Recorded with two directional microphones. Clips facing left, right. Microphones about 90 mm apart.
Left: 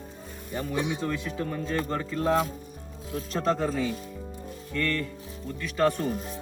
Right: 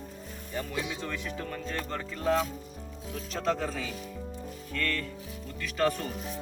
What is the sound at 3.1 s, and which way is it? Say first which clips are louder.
Speech: left 4 dB; 40° left (ahead or behind).